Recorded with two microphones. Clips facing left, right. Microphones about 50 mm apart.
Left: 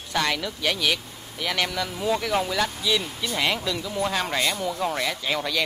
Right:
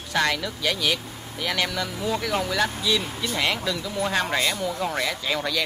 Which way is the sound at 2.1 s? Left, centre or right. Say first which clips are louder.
Left 1 dB; centre.